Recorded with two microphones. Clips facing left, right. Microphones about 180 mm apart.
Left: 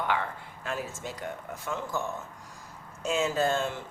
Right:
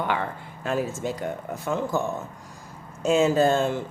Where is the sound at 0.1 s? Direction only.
35° right (ahead or behind).